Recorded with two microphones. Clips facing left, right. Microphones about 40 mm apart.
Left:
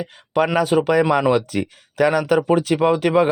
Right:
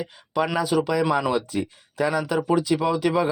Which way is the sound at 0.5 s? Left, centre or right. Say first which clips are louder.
Left 6 dB; left.